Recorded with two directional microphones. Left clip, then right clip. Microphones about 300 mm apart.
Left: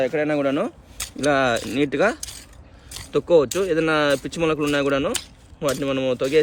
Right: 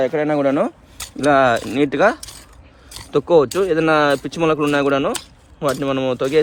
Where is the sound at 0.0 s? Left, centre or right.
Right.